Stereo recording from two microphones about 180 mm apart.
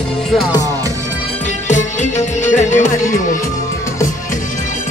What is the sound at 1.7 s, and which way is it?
Music, 40° left (ahead or behind).